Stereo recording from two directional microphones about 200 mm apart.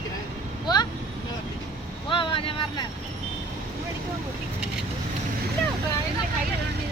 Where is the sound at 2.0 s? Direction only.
25° left (ahead or behind).